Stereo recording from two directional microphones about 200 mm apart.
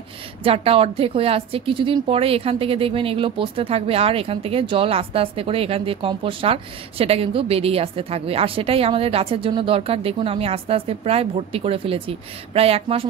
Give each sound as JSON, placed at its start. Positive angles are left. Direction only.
{"t": 0.4, "sound": "a woman's voice", "side_deg": -30}